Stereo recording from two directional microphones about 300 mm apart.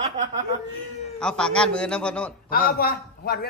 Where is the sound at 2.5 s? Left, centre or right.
Left.